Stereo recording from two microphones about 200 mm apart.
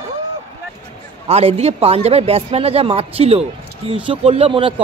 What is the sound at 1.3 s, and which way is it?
A man's voice, 30° right (ahead or behind).